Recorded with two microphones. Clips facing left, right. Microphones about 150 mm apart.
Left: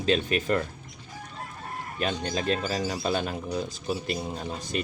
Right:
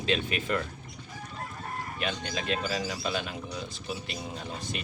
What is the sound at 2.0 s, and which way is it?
Speech, 40° left (ahead or behind).